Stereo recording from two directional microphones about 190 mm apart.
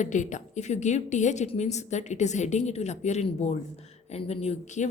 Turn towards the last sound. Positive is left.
turn(degrees=40)  # may be behind; listen again after turning